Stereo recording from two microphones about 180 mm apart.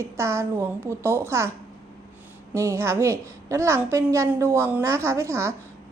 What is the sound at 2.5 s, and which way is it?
A woman's voice, 15° right (ahead or behind).